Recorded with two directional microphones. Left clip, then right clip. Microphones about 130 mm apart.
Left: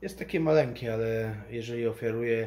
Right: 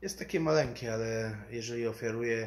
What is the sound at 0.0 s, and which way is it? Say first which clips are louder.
Speech: left 3 dB; 10° left (ahead or behind).